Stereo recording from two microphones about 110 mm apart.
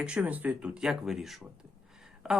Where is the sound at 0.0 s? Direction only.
10° right (ahead or behind).